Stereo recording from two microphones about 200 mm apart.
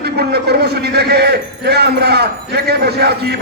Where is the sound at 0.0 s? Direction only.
55° right (ahead or behind).